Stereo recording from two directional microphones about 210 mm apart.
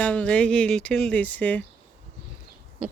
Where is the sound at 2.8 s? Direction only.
5° right (ahead or behind).